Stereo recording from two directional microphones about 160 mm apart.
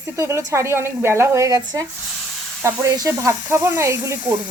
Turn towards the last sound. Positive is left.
turn(degrees=-20)  # may be behind; listen again after turning